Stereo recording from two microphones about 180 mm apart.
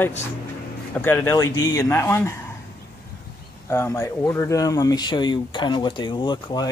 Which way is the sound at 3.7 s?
15° left (ahead or behind).